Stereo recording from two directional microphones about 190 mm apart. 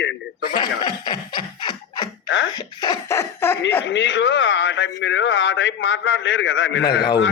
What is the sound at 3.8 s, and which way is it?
A man's voice, 70° left (ahead or behind).